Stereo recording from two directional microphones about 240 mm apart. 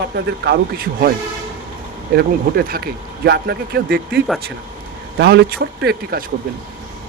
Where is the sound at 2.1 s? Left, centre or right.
Right.